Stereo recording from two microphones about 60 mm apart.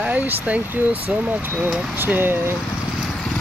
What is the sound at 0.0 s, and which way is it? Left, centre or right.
Speech, right.